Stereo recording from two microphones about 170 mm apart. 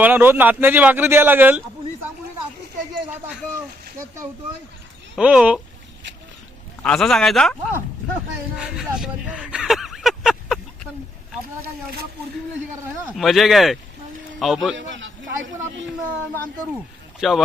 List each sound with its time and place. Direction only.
0.0 s a man's voice: 10° right (ahead or behind)
5.1 s speech: 5° right (ahead or behind)
6.8 s speech: 5° left (ahead or behind)
8.5 s a sound: 5° right (ahead or behind)
13.1 s speech: centre (ahead or behind)
14.8 s a man's voice: 90° right
17.2 s speech: centre (ahead or behind)